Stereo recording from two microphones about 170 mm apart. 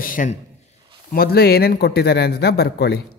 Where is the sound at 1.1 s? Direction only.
65° left (ahead or behind).